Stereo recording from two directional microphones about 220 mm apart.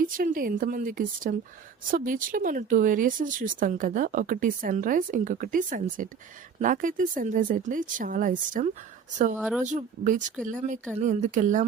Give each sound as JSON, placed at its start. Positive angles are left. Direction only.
{"t": 0.0, "sound": "speech", "side_deg": -40}
{"t": 9.4, "sound": "speech", "side_deg": -5}
{"t": 9.6, "sound": "speech", "side_deg": -35}